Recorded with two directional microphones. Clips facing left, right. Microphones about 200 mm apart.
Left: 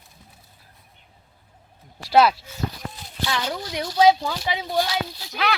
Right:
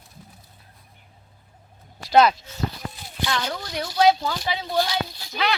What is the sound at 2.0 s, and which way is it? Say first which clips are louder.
Speech: even; 5° left (ahead or behind).